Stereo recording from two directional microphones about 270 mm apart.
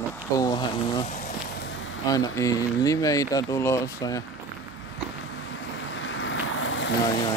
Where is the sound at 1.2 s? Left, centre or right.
Left.